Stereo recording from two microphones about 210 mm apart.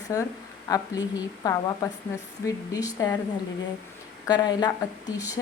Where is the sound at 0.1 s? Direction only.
15° left (ahead or behind).